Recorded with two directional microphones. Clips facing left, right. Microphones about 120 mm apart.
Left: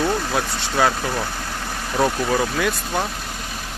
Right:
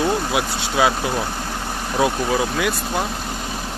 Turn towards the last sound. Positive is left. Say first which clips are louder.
# even
turn(degrees=-5)  # may be behind; listen again after turning